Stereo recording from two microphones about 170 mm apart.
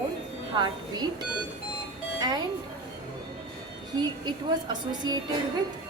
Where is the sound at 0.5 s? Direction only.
25° right (ahead or behind).